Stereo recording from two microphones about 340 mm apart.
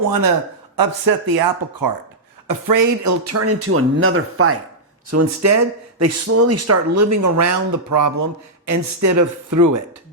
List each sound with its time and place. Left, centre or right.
0.8 s speech: right
2.5 s speech: right
5.1 s speech: right